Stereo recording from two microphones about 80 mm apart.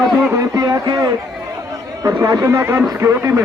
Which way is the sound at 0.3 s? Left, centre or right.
Right.